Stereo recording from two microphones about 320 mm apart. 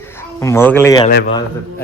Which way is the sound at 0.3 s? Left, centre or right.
Centre.